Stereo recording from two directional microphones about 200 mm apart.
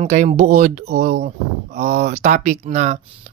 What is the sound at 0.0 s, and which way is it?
Speech, 35° right (ahead or behind).